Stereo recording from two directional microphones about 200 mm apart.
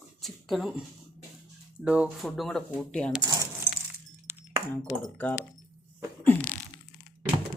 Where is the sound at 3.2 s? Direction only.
20° right (ahead or behind).